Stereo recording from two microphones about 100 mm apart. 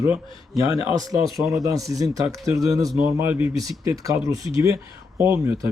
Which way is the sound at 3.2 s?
20° right (ahead or behind).